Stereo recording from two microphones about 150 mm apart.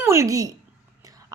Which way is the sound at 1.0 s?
20° right (ahead or behind).